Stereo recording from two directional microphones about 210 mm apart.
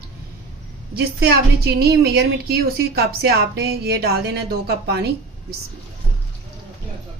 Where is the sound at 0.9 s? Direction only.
50° right (ahead or behind).